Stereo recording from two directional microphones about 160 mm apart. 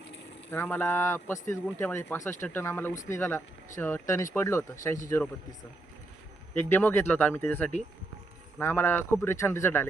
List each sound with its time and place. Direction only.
0.5 s a man's voice: 15° left (ahead or behind)
6.5 s a man's voice: 10° left (ahead or behind)